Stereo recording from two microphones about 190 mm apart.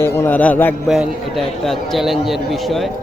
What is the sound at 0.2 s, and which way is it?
A man's voice, 10° left (ahead or behind).